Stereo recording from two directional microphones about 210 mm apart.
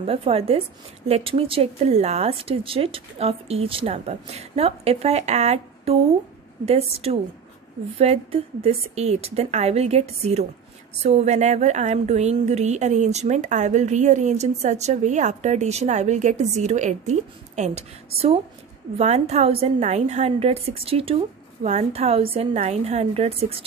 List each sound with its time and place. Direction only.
0.0 s a woman's voice: 30° right (ahead or behind)